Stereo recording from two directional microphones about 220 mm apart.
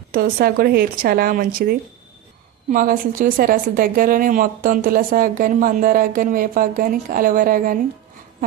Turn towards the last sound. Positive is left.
turn(degrees=-40)  # may be behind; listen again after turning